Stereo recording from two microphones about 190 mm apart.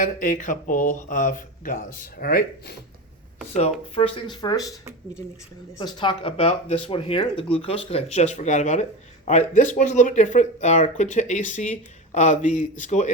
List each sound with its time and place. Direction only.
0.0 s speech: 45° left (ahead or behind)
3.5 s speech: 30° left (ahead or behind)
5.7 s speech: 25° left (ahead or behind); by 13.1 s 40° left (ahead or behind)